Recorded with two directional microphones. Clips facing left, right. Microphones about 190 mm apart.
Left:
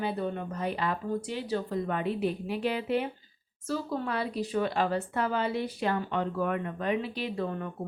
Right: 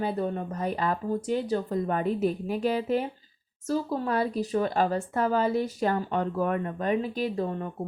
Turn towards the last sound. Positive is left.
turn(degrees=-30)  # may be behind; listen again after turning